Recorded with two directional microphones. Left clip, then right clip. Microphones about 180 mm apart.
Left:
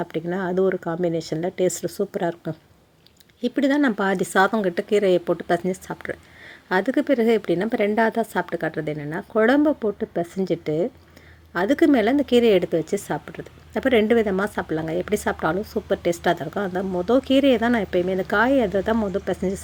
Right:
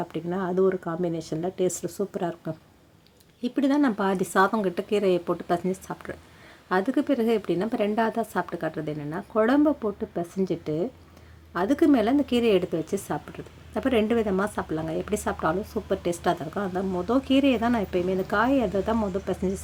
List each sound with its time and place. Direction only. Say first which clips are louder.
0.0 s speech: left 4 dB; 25° left (ahead or behind)